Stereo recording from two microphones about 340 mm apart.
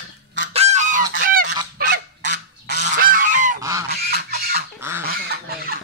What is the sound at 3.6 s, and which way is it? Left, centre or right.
Goose, centre.